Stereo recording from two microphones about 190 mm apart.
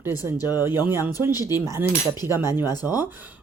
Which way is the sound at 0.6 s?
10° right (ahead or behind).